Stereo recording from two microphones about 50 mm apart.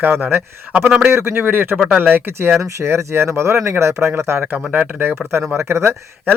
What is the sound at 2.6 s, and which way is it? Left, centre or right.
Speech, right.